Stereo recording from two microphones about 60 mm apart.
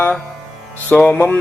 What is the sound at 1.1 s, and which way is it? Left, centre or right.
Music, left.